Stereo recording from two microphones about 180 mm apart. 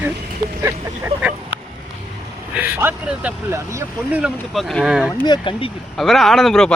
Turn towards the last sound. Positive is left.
turn(degrees=0)  # may be behind; listen again after turning